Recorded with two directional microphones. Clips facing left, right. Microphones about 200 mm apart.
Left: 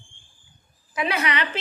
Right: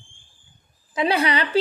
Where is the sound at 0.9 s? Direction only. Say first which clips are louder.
Right 4 dB; 30° right (ahead or behind).